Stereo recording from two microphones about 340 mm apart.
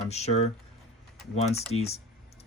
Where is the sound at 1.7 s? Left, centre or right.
Centre.